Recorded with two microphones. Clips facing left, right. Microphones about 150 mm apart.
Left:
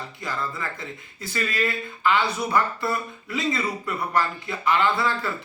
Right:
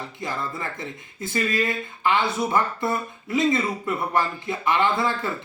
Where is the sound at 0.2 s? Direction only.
20° right (ahead or behind).